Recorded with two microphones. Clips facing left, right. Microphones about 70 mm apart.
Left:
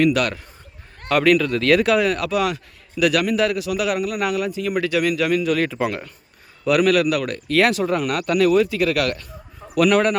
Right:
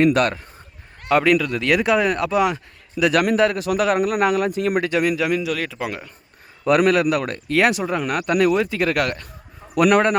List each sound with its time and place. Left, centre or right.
0.0 s a man's voice: right
1.0 s a man's voice: right
5.1 s a man's voice: centre
5.5 s speech: centre
6.7 s speech: right